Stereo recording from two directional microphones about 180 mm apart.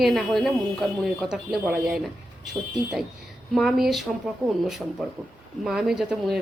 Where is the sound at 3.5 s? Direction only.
Centre (ahead or behind).